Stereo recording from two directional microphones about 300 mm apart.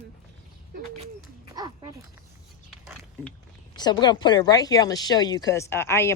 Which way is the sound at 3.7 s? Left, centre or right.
Centre.